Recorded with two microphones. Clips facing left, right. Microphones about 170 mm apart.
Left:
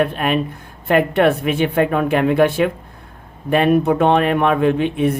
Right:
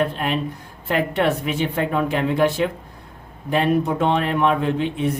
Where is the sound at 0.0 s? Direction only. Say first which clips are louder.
Left 4 dB; 60° left (ahead or behind).